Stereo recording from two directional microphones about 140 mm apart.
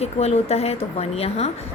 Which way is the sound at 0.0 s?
50° left (ahead or behind).